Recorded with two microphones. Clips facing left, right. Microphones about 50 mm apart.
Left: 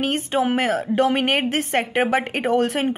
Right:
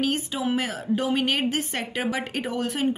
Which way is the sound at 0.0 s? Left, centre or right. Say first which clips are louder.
Left 5 dB; left.